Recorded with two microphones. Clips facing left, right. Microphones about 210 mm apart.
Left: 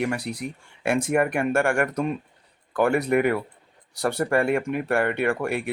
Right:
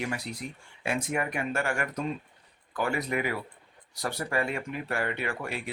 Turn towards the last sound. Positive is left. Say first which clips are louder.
# left 9 dB
turn(degrees=60)  # may be behind; listen again after turning